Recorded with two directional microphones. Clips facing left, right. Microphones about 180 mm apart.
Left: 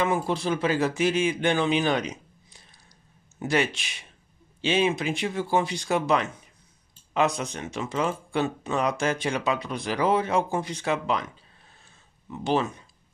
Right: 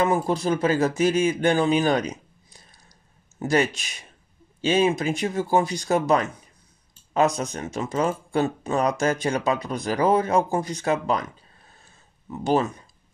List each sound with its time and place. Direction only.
0.0 s speech: 40° right (ahead or behind)
12.3 s speech: 40° right (ahead or behind)